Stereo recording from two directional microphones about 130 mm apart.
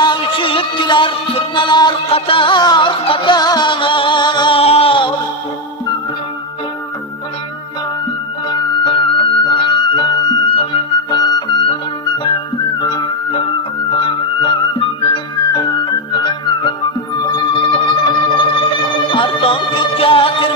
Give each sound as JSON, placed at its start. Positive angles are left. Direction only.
{"t": 0.0, "sound": "music", "side_deg": 40}
{"t": 8.5, "sound": "music", "side_deg": 35}
{"t": 12.8, "sound": "music", "side_deg": 30}
{"t": 15.5, "sound": "music", "side_deg": 30}